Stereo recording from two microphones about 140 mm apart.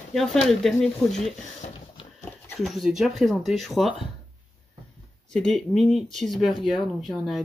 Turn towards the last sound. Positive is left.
turn(degrees=0)  # may be behind; listen again after turning